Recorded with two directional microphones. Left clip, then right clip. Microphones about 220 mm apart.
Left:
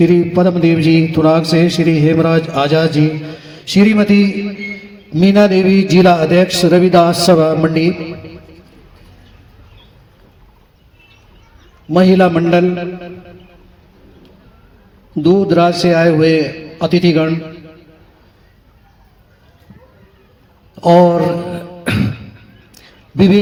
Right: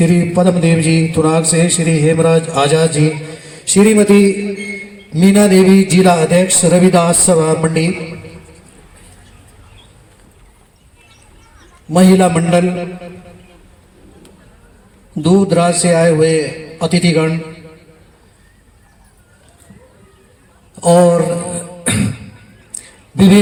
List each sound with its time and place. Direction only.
0.0 s a man's voice: 35° left (ahead or behind)
11.9 s a man's voice: 35° left (ahead or behind)
15.4 s a man's voice: 35° left (ahead or behind)
20.7 s a woman's voice: 35° left (ahead or behind)
21.5 s beatboxing: 35° left (ahead or behind)